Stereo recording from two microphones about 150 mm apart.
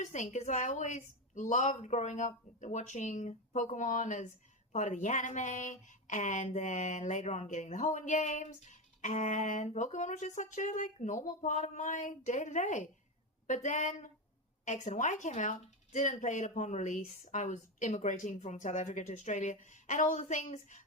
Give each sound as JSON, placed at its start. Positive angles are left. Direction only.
{"t": 0.0, "sound": "a woman's voice", "side_deg": 55}